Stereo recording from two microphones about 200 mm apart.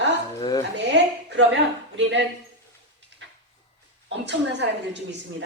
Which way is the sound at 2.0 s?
65° right (ahead or behind).